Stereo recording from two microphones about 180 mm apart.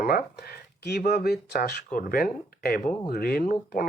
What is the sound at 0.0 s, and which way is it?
Speech, 60° left (ahead or behind).